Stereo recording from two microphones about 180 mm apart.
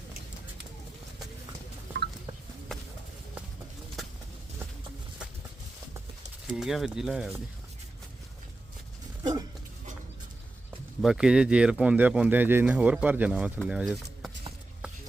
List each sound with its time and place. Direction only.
6.6 s speech: centre (ahead or behind)
9.2 s dog: 20° right (ahead or behind)
11.0 s speech: 5° right (ahead or behind)